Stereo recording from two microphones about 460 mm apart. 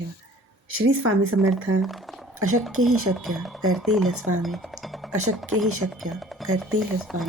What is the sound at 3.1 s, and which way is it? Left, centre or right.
Speech, centre.